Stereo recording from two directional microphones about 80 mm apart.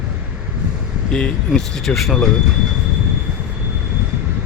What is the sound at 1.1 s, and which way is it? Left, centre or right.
Speech, centre.